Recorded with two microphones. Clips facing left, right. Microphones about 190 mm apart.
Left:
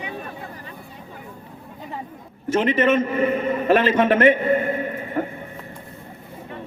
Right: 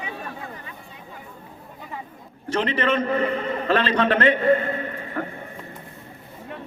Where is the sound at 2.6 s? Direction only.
15° left (ahead or behind).